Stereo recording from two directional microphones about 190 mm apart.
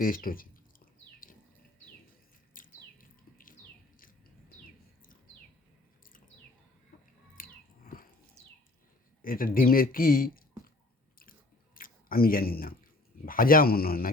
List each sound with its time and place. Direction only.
0.0 s speech: 50° left (ahead or behind)
1.2 s a sound: 45° left (ahead or behind)
2.6 s bird: 45° left (ahead or behind)
7.3 s a sound: 45° left (ahead or behind)
9.2 s speech: 50° left (ahead or behind)
11.2 s chewing: 50° left (ahead or behind)
13.2 s speech: 50° left (ahead or behind)